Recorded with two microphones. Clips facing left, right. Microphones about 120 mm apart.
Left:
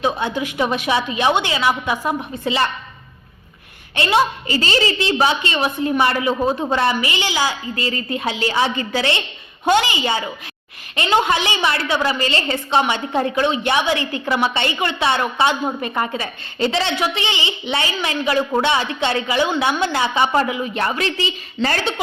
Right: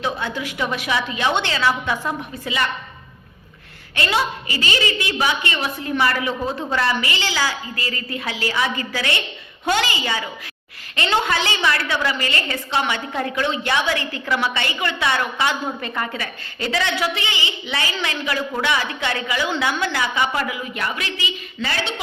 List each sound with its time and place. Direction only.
0.0 s a woman's voice: 20° left (ahead or behind)
3.9 s a woman's voice: 25° left (ahead or behind); by 22.0 s 45° left (ahead or behind)